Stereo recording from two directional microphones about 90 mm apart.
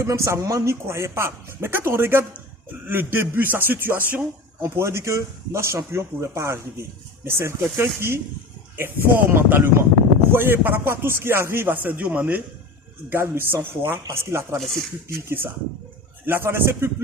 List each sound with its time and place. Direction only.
0.0 s a man's voice: 40° right (ahead or behind)